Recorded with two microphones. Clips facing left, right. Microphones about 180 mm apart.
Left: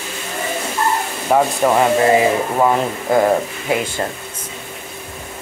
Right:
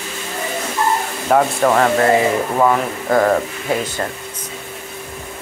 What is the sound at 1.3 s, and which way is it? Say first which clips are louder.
Speech: even; 10° left (ahead or behind).